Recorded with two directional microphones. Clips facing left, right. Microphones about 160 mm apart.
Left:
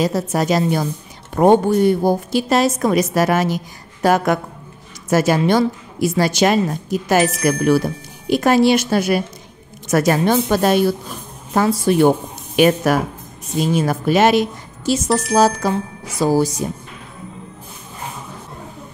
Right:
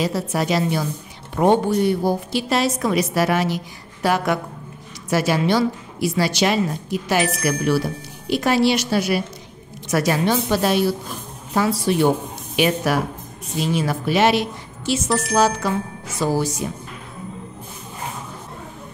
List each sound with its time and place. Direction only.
0.0 s a woman's voice: 45° left (ahead or behind)
15.3 s music: 40° left (ahead or behind)